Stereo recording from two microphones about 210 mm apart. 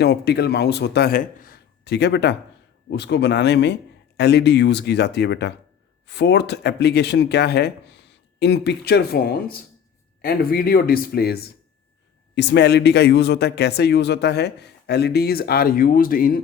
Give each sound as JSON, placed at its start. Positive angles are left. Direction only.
{"t": 0.0, "sound": "a man's voice", "side_deg": 50}